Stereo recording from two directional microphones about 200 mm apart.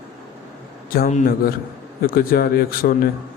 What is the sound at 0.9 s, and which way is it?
A man's voice, 40° left (ahead or behind).